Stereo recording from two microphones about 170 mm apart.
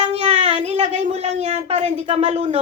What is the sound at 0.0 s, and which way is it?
Child singing, 40° right (ahead or behind).